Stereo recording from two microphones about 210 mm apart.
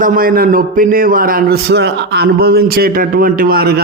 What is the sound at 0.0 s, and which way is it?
A man's voice, 40° right (ahead or behind).